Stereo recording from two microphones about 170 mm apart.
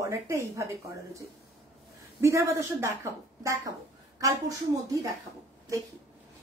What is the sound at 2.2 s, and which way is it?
A woman's voice, 15° right (ahead or behind).